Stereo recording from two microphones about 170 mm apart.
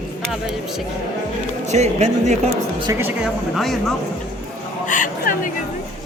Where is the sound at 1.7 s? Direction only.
40° right (ahead or behind).